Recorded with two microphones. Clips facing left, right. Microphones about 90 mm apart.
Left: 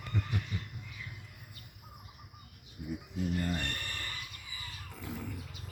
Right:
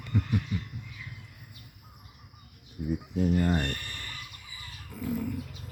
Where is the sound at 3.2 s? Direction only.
55° right (ahead or behind).